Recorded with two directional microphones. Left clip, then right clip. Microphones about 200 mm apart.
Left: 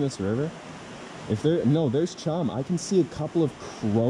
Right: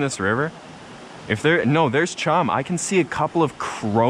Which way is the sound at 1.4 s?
45° right (ahead or behind).